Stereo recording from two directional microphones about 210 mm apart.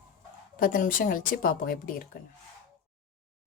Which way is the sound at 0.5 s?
40° left (ahead or behind).